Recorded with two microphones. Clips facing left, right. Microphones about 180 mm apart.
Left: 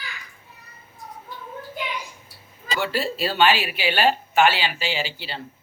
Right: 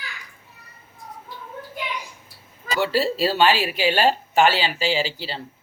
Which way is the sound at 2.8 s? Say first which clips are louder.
Right 4 dB; 35° right (ahead or behind).